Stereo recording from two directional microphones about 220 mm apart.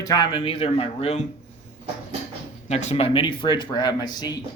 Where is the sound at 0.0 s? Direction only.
20° left (ahead or behind).